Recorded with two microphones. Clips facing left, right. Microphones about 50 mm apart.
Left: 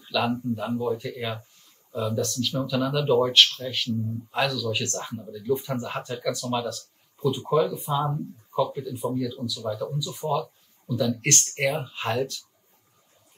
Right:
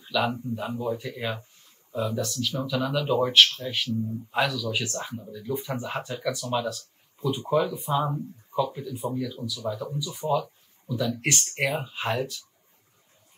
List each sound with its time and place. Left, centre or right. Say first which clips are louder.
0.3 s speech: left 4 dB; centre